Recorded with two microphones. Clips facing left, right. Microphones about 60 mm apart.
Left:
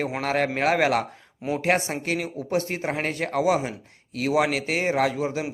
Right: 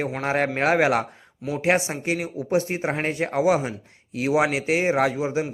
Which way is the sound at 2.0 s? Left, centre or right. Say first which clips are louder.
Right 2 dB; centre.